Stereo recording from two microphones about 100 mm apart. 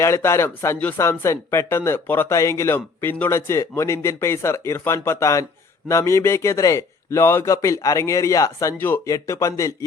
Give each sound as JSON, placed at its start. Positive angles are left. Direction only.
{"t": 0.0, "sound": "a man's voice", "side_deg": 30}